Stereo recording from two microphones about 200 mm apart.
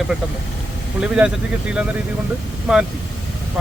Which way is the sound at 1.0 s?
5° right (ahead or behind).